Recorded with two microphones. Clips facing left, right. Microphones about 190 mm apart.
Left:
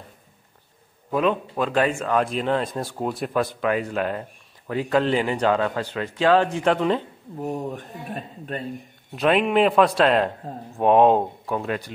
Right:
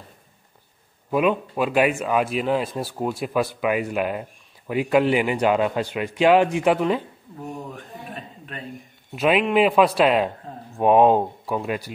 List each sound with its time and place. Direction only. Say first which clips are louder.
1.1 s speech: right 1 dB; 10° right (ahead or behind)
7.4 s speech: left 6 dB; 35° left (ahead or behind)
9.1 s speech: even; 5° right (ahead or behind)